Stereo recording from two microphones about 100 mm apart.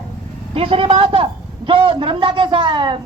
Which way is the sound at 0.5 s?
70° right (ahead or behind).